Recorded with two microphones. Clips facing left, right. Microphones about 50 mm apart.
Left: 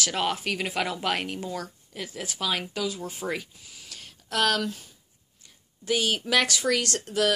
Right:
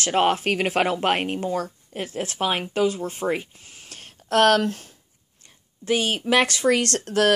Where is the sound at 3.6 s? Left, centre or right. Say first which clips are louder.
Right 2 dB; right.